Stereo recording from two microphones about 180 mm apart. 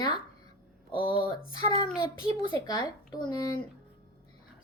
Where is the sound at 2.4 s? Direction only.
25° left (ahead or behind).